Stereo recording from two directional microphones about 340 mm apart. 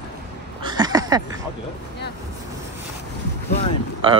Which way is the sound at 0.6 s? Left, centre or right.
Centre.